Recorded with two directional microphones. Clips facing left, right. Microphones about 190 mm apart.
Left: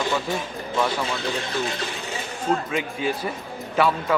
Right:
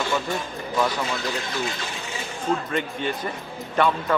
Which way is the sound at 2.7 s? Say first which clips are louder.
Left 1 dB; 5° left (ahead or behind).